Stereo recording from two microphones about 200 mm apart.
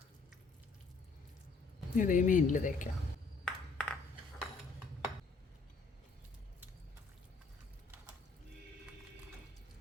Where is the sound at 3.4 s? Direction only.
5° left (ahead or behind).